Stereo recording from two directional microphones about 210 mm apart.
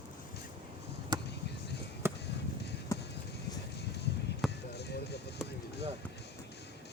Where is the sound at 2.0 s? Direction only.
10° right (ahead or behind).